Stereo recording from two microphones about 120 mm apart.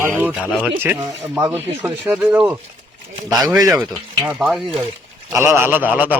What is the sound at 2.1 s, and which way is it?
Speech, 10° right (ahead or behind).